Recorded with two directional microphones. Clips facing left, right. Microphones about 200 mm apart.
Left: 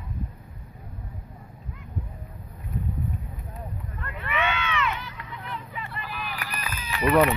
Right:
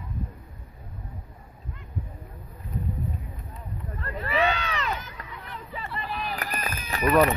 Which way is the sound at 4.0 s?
35° right (ahead or behind).